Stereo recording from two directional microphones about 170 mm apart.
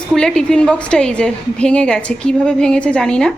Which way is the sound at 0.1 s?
5° left (ahead or behind).